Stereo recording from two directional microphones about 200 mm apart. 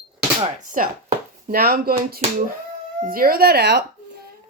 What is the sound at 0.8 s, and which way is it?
Speech, 40° right (ahead or behind).